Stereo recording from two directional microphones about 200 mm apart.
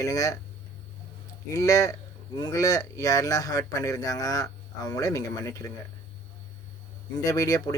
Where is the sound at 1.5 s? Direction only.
15° left (ahead or behind).